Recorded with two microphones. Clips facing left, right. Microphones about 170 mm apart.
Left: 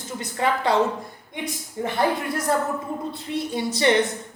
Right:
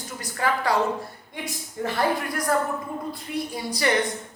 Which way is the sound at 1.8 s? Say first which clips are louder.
Left 1 dB; 25° left (ahead or behind).